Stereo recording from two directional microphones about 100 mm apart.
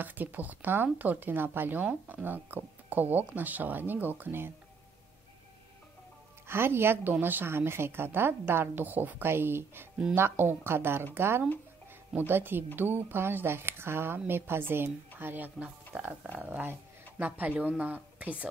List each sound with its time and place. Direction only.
0.0 s speech: 20° right (ahead or behind)
6.4 s a woman's voice: 25° right (ahead or behind)